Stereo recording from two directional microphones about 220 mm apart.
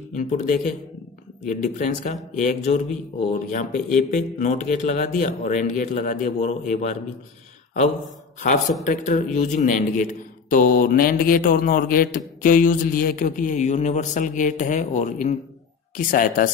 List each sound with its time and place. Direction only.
0.1 s a man's voice: 35° left (ahead or behind)
8.4 s a man's voice: 35° left (ahead or behind)